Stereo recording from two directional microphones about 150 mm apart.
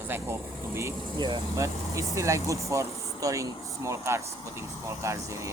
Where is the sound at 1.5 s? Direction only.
20° right (ahead or behind).